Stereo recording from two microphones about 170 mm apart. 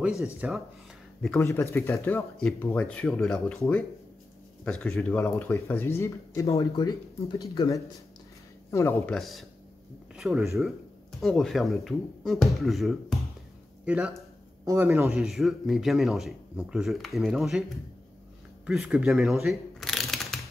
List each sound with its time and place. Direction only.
0.2 s speech: 5° right (ahead or behind)
1.4 s speech: 15° left (ahead or behind)
4.6 s speech: 5° left (ahead or behind)
9.1 s speech: centre (ahead or behind)
14.6 s speech: 15° right (ahead or behind)
15.1 s speech: centre (ahead or behind)
18.7 s speech: 5° right (ahead or behind)